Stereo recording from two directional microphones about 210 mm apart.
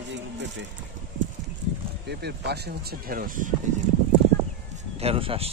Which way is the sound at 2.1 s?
50° right (ahead or behind).